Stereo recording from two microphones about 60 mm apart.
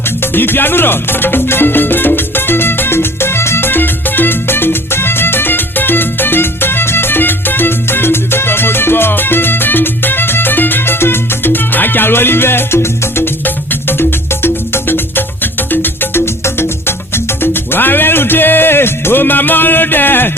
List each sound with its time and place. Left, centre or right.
0.2 s music: left